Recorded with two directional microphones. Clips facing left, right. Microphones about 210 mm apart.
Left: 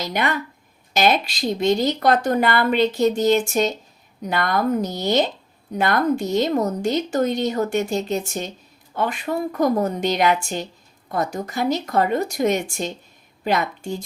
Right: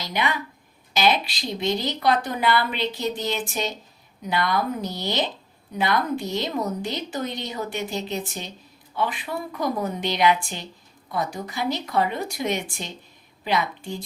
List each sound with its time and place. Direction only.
0.0 s a woman's voice: 50° left (ahead or behind)